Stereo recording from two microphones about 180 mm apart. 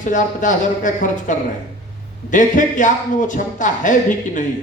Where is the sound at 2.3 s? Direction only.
45° left (ahead or behind).